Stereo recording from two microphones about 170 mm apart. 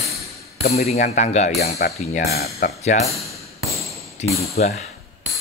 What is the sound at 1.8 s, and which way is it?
Speech, 55° left (ahead or behind).